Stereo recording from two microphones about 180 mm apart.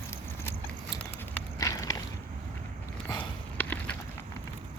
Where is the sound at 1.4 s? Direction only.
15° left (ahead or behind).